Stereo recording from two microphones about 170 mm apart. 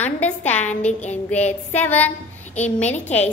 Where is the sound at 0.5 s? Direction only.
10° left (ahead or behind).